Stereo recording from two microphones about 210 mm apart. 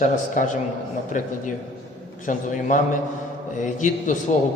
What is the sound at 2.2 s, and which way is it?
A man's voice, 35° left (ahead or behind).